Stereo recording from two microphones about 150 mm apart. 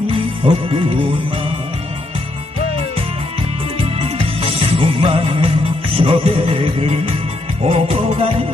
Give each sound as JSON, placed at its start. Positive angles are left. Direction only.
{"t": 0.1, "sound": "music", "side_deg": -40}
{"t": 4.0, "sound": "music", "side_deg": -45}